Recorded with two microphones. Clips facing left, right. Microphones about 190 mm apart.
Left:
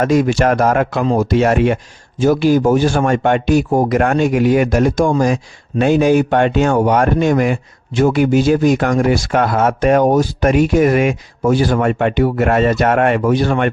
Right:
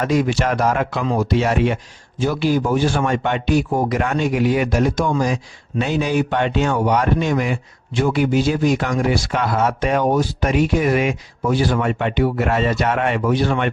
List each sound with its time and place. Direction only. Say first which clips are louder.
0.0 s speech: left 5 dB; 45° left (ahead or behind)